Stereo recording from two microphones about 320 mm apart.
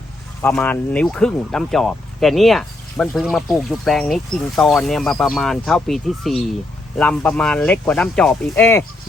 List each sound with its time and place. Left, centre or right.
0.4 s speech: centre